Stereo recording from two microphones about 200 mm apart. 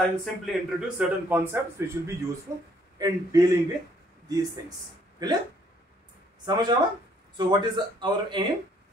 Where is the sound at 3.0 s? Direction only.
15° right (ahead or behind).